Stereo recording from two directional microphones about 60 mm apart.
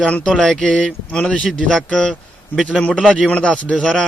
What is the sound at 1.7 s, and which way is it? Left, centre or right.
Speech, centre.